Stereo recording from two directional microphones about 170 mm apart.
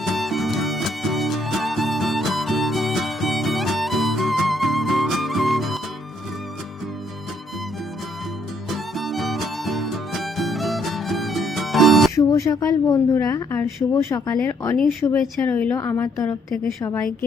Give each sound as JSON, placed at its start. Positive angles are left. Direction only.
{"t": 0.0, "sound": "music", "side_deg": 0}
{"t": 8.7, "sound": "music", "side_deg": 0}
{"t": 12.1, "sound": "a woman's voice", "side_deg": 20}